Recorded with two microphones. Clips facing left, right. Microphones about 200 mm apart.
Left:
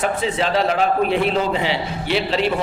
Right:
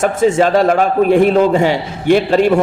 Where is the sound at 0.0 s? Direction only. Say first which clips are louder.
Right 9 dB; 45° right (ahead or behind).